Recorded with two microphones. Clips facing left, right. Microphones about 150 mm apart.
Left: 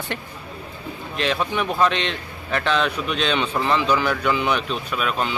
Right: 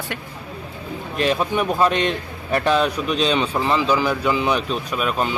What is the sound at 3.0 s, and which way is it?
Speech, 35° right (ahead or behind).